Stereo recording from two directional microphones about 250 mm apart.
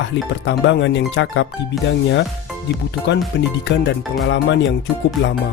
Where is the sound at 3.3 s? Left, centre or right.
Left.